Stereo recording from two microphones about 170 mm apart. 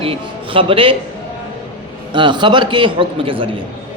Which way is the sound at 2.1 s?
30° right (ahead or behind).